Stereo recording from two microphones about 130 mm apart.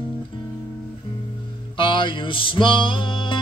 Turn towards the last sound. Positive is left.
turn(degrees=40)  # may be behind; listen again after turning